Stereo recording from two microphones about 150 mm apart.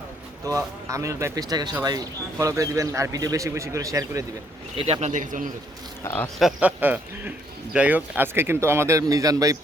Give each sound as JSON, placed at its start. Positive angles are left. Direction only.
{"t": 0.4, "sound": "speech", "side_deg": -20}
{"t": 4.8, "sound": "speech", "side_deg": -45}
{"t": 6.4, "sound": "speech", "side_deg": -10}